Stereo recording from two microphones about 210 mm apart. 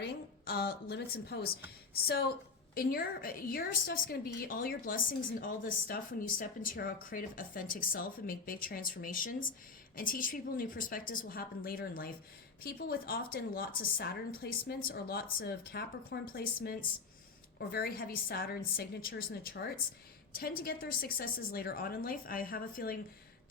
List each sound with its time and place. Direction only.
0.0 s a woman's voice: 45° left (ahead or behind)
2.7 s a woman's voice: 45° left (ahead or behind)